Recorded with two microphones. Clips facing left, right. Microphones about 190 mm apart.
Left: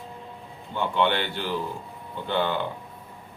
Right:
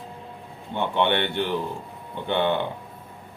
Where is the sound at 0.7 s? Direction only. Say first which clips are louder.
Right 1 dB; 20° right (ahead or behind).